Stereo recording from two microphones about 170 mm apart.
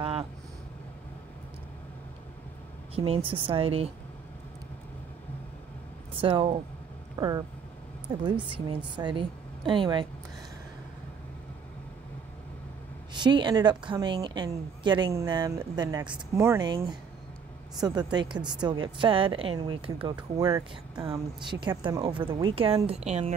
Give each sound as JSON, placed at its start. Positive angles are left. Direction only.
{"t": 0.0, "sound": "vehicle", "side_deg": -30}
{"t": 3.3, "sound": "a woman's voice", "side_deg": -30}
{"t": 6.2, "sound": "a woman's voice", "side_deg": -30}
{"t": 13.1, "sound": "a woman's voice", "side_deg": -25}